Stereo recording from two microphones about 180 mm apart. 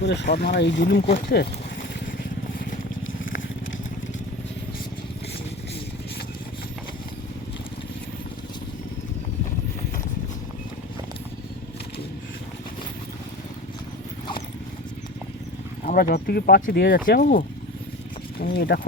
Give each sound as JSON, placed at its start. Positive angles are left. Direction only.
{"t": 0.0, "sound": "speech", "side_deg": 75}
{"t": 1.1, "sound": "speech", "side_deg": 60}
{"t": 15.9, "sound": "speech", "side_deg": 55}
{"t": 18.3, "sound": "speech", "side_deg": 60}